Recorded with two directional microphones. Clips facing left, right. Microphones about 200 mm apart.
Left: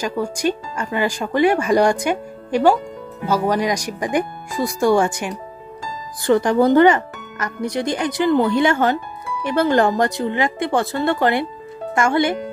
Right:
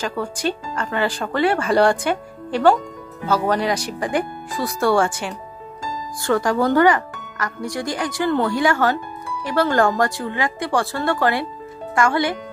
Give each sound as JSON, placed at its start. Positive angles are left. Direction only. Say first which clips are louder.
{"t": 0.0, "sound": "speech", "louder": "left 3 dB", "side_deg": 15}